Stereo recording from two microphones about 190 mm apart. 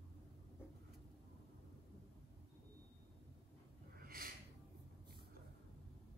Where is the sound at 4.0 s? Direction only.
50° right (ahead or behind).